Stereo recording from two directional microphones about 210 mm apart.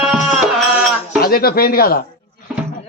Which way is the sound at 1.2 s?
45° left (ahead or behind).